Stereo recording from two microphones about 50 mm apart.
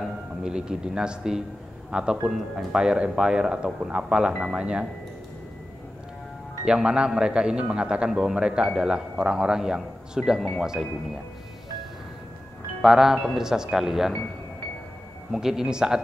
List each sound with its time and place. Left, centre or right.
0.0 s a man's voice: centre
4.6 s speech: right
6.6 s speech: centre
8.1 s speech: centre
12.8 s speech: centre
15.3 s speech: centre